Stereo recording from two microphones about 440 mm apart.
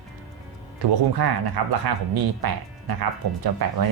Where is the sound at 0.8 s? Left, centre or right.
Right.